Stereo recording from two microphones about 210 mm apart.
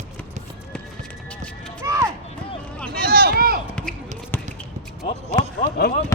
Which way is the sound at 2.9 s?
45° right (ahead or behind).